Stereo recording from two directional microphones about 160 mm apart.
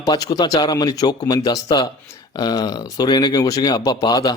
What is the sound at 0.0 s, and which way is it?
Speech, 25° left (ahead or behind).